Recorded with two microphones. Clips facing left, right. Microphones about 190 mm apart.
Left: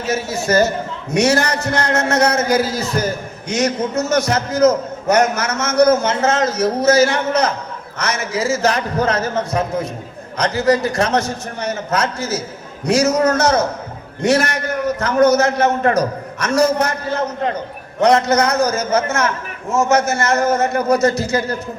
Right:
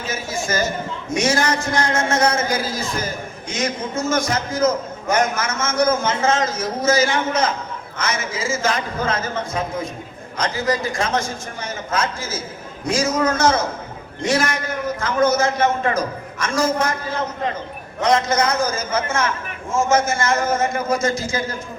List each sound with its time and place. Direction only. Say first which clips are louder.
0.0 s a man's voice: left 5 dB; 70° left (ahead or behind)
15.6 s a man's voice: left 3 dB; 40° left (ahead or behind)
16.0 s a man's voice: left 5 dB; 70° left (ahead or behind)
18.0 s a man's voice: left 4 dB; 65° left (ahead or behind)